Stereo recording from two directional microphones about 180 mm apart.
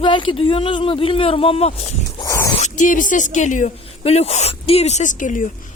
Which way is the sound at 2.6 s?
40° left (ahead or behind).